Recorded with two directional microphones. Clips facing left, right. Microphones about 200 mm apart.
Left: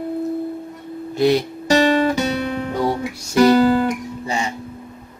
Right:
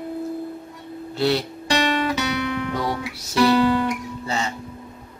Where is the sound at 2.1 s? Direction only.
40° left (ahead or behind).